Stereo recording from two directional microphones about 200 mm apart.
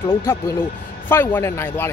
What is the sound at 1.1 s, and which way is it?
Speech, 10° left (ahead or behind).